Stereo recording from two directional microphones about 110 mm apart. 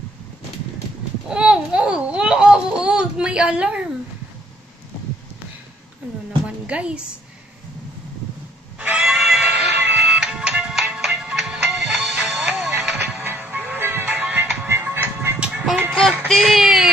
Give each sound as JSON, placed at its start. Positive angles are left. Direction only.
{"t": 1.3, "sound": "a sound", "side_deg": -10}
{"t": 6.4, "sound": "a woman's voice", "side_deg": -10}
{"t": 8.7, "sound": "music", "side_deg": -10}
{"t": 13.2, "sound": "music", "side_deg": -20}
{"t": 15.6, "sound": "music", "side_deg": 0}
{"t": 16.3, "sound": "speech", "side_deg": 0}